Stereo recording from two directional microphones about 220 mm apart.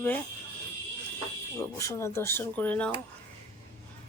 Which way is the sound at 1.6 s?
10° left (ahead or behind).